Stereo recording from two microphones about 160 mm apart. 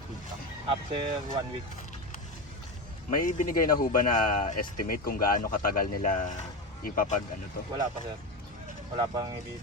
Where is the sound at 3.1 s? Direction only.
60° left (ahead or behind).